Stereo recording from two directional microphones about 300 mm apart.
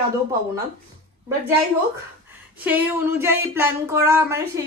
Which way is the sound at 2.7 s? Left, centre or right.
Centre.